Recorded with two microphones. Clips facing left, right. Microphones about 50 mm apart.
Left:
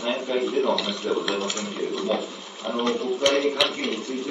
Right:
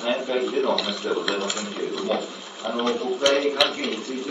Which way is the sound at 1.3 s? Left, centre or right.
Centre.